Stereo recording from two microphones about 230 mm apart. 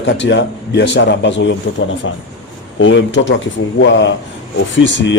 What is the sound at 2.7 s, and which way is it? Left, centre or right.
Speech, left.